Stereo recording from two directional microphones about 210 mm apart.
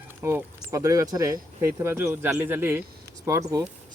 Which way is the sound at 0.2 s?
10° right (ahead or behind).